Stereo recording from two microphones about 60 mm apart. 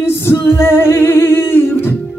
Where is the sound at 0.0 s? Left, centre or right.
Left.